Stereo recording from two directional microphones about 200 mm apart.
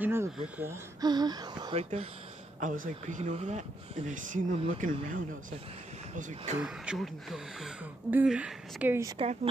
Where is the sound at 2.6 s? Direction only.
40° right (ahead or behind).